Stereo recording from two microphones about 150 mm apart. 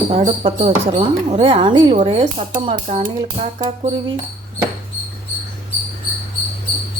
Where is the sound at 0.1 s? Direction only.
50° right (ahead or behind).